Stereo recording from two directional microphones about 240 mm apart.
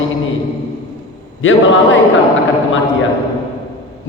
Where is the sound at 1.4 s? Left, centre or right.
Left.